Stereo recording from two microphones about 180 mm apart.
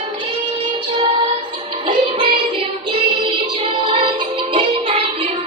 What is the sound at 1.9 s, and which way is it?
Music, 30° right (ahead or behind).